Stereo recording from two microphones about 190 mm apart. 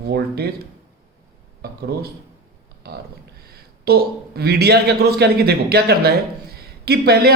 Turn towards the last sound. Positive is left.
turn(degrees=-55)  # may be behind; listen again after turning